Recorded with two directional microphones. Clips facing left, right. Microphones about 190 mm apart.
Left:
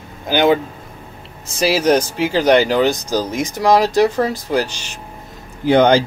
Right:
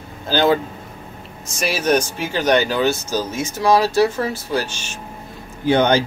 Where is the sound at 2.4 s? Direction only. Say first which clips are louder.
Left 3 dB; 10° left (ahead or behind).